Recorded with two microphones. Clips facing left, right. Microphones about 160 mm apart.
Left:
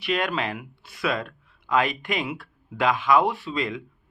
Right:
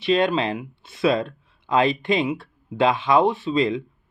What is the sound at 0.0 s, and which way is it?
Speech, 25° right (ahead or behind).